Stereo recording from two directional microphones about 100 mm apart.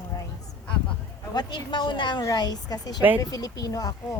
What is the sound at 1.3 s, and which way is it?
A woman's voice, 50° left (ahead or behind).